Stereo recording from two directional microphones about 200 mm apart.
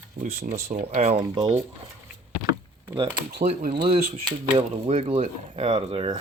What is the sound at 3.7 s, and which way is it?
Speech, 25° right (ahead or behind).